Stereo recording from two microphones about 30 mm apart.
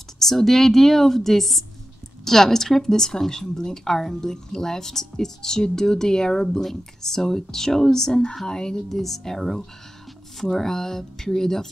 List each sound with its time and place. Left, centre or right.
0.3 s speech: centre
8.8 s speech: centre